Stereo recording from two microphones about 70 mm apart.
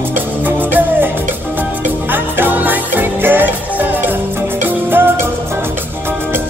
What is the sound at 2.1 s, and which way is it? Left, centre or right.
Music, right.